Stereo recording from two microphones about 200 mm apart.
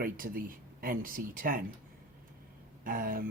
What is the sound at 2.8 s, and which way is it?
Speech, 45° right (ahead or behind).